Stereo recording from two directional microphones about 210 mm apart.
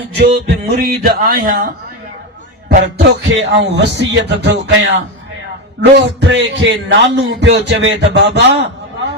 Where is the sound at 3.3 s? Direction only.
55° right (ahead or behind).